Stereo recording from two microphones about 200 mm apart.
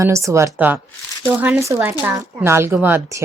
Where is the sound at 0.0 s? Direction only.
15° right (ahead or behind).